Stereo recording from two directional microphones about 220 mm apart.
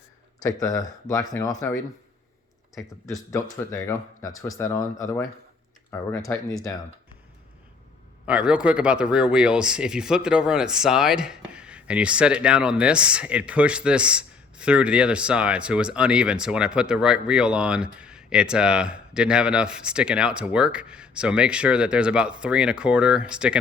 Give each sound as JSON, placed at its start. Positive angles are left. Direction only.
{"t": 0.4, "sound": "speech", "side_deg": 15}
{"t": 3.7, "sound": "speech", "side_deg": 15}
{"t": 8.3, "sound": "speech", "side_deg": -5}